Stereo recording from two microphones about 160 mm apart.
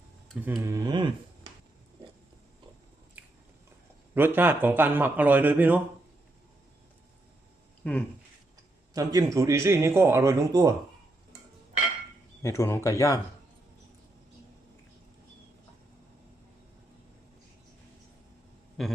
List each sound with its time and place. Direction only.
0.3 s a man's voice: 10° right (ahead or behind)
4.1 s a man's voice: 15° right (ahead or behind)
7.8 s speech: 10° left (ahead or behind)
8.9 s a man's voice: 20° right (ahead or behind)
12.4 s speech: 15° left (ahead or behind)
18.8 s a sound: centre (ahead or behind)